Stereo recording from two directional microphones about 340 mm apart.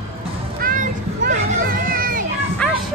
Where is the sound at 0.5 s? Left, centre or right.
Right.